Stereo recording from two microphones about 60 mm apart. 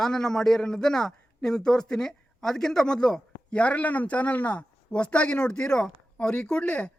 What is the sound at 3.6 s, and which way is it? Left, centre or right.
A woman's voice, left.